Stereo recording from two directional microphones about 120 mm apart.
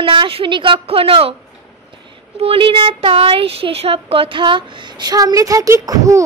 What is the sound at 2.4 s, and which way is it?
Speech, 50° right (ahead or behind).